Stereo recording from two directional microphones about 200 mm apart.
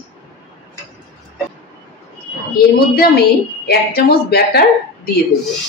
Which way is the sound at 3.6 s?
50° left (ahead or behind).